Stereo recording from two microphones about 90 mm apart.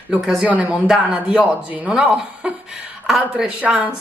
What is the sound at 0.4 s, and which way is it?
Speech, 15° right (ahead or behind).